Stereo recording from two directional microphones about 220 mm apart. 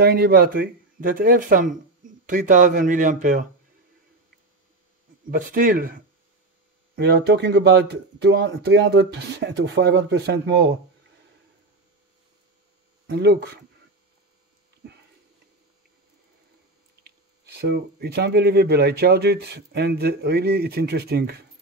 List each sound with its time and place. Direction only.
0.0 s speech: 45° right (ahead or behind)
5.3 s speech: 40° right (ahead or behind)
13.0 s speech: 45° right (ahead or behind)
17.6 s speech: 45° right (ahead or behind)